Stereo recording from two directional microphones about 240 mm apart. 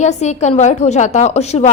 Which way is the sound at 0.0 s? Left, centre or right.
Left.